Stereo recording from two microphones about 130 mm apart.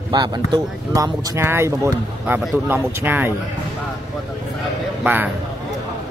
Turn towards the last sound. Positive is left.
turn(degrees=-15)  # may be behind; listen again after turning